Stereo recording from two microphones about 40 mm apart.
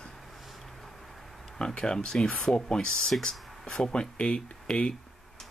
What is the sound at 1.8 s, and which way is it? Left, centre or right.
Speech, left.